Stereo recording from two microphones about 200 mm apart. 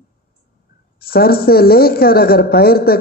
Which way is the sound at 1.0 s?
50° left (ahead or behind).